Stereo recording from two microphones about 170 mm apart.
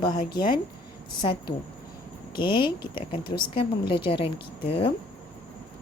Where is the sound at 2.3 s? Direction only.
30° left (ahead or behind).